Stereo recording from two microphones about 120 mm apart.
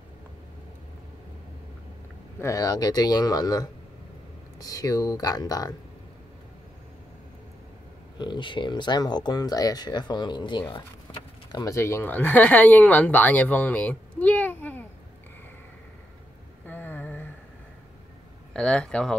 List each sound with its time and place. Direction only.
2.4 s speech: 30° left (ahead or behind)
8.2 s speech: 40° left (ahead or behind)
11.5 s speech: 25° left (ahead or behind)
16.6 s a sound: 15° left (ahead or behind)
18.5 s speech: 5° left (ahead or behind)